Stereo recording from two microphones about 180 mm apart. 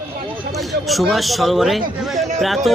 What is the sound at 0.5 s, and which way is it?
Speech, centre (ahead or behind).